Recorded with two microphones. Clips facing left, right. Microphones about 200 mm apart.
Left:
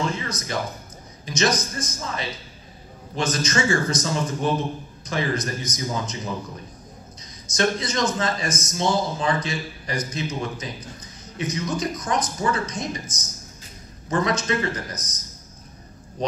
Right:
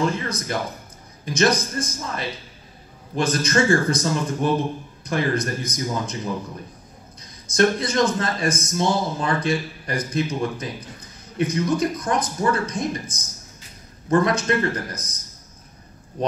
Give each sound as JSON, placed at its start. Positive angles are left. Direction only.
{"t": 0.1, "sound": "a man's voice", "side_deg": -55}
{"t": 7.4, "sound": "a man's voice", "side_deg": -55}